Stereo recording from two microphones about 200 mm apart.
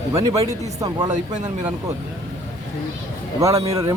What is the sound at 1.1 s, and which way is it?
Speech, 35° right (ahead or behind).